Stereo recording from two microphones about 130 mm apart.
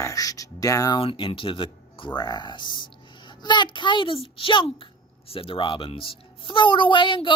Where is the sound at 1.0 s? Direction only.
45° left (ahead or behind).